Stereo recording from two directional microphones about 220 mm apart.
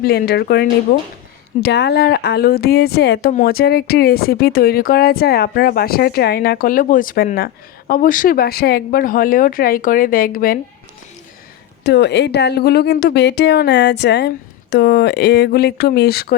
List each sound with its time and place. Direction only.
0.0 s speech: 45° left (ahead or behind)
11.8 s speech: 50° left (ahead or behind)